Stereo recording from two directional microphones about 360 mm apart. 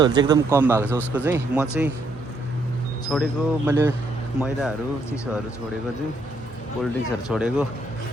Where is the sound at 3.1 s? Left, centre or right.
Centre.